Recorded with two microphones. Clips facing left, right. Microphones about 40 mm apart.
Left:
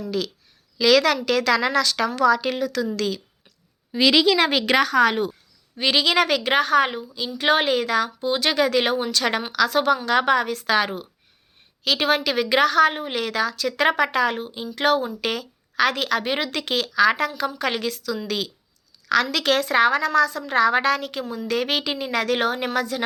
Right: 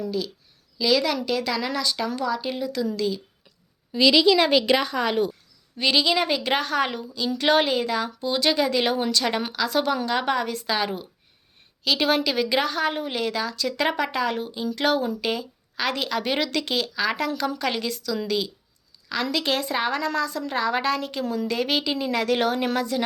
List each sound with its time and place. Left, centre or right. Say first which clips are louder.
0.8 s a woman's voice: left 5 dB; left
2.9 s a woman's voice: left 1 dB; left
3.9 s a woman's voice: even; left
5.1 s a woman's voice: right 1 dB; left
6.1 s speech: left 3 dB; left
6.4 s a woman's voice: left 5 dB; left
12.9 s a woman's voice: even; left
14.3 s a woman's voice: right 2 dB; left
15.2 s a woman's voice: left 1 dB; left
18.3 s a woman's voice: right 1 dB; left